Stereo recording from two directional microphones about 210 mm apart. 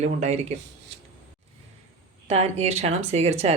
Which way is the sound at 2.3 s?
30° right (ahead or behind).